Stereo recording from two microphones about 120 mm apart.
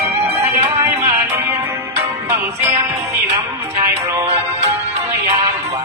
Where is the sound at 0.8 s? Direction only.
20° right (ahead or behind).